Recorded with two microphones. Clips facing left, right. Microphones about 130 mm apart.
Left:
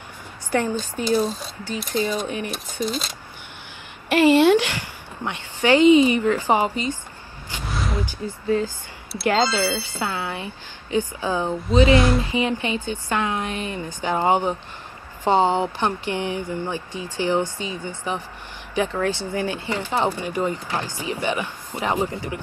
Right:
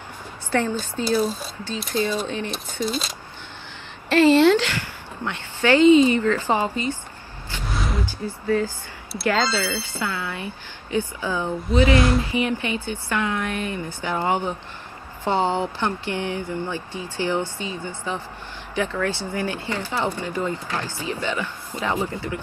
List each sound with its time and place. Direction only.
0.5 s speech: 15° left (ahead or behind)
4.1 s speech: 15° left (ahead or behind)
8.0 s speech: 15° left (ahead or behind)